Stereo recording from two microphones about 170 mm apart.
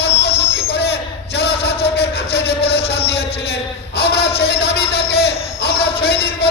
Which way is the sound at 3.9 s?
70° left (ahead or behind).